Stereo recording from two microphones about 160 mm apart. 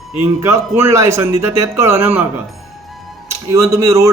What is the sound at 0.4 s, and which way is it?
A man's voice, 15° right (ahead or behind).